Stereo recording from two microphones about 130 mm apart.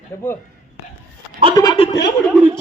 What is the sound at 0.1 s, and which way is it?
Speech, 20° left (ahead or behind).